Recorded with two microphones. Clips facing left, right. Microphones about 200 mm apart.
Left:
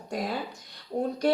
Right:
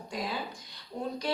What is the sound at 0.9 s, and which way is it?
Speech, 40° left (ahead or behind).